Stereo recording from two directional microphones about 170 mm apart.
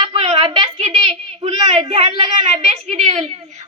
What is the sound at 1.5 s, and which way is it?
A woman's voice, 40° right (ahead or behind).